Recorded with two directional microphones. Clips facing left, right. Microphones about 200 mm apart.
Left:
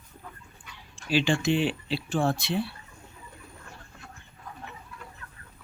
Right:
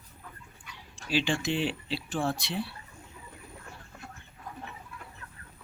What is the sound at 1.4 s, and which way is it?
Speech, 60° left (ahead or behind).